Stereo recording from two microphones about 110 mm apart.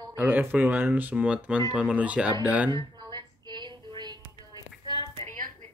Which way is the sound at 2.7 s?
40° right (ahead or behind).